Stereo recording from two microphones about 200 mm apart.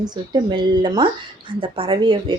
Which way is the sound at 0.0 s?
20° right (ahead or behind).